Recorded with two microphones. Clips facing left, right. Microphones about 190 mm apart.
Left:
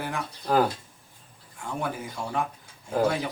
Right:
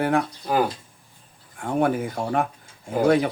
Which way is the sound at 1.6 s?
60° right (ahead or behind).